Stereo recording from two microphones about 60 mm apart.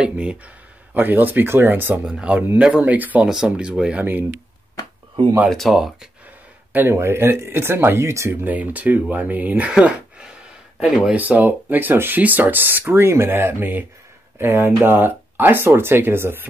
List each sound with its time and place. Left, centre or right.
0.0 s speech: centre
0.9 s speech: right
2.0 s speech: centre
3.3 s speech: centre
4.0 s speech: right
5.7 s speech: centre
6.7 s speech: right
8.0 s speech: right
8.3 s speech: right
8.5 s speech: right
11.1 s speech: right